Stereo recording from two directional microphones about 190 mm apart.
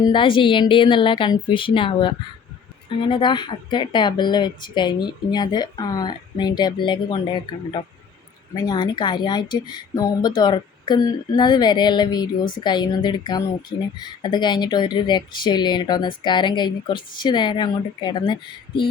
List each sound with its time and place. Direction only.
0.0 s speech: 25° left (ahead or behind)